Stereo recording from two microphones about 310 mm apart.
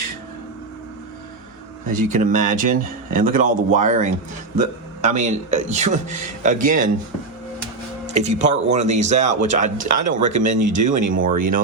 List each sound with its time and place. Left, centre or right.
1.9 s speech: right
5.0 s speech: right
8.0 s speech: right